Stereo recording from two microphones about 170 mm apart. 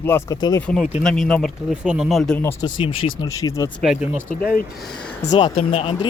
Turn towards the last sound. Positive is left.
turn(degrees=35)  # may be behind; listen again after turning